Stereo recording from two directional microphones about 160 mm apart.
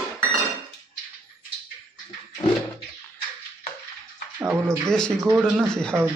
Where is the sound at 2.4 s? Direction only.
20° left (ahead or behind).